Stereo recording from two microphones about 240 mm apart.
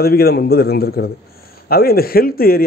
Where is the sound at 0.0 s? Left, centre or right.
Left.